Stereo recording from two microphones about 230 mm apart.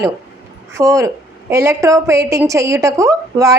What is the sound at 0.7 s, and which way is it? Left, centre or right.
A woman's voice, centre.